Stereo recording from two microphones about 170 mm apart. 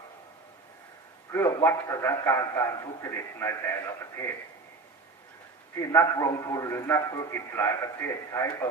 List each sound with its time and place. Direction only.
1.3 s a man's voice: 20° left (ahead or behind)
5.7 s a man's voice: 15° left (ahead or behind)